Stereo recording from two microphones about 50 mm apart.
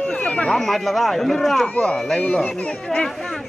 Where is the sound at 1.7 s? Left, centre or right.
Left.